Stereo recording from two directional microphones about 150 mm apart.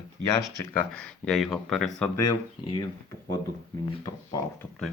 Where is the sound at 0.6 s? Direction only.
10° left (ahead or behind).